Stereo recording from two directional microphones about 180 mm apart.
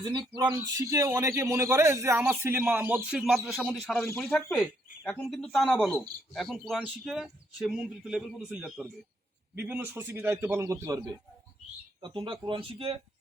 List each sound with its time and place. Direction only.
0.0 s a man's voice: 25° right (ahead or behind)